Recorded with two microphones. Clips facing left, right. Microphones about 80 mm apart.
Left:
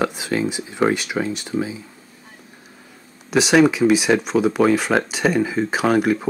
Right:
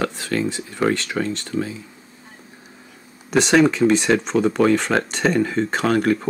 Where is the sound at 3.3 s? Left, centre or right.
Centre.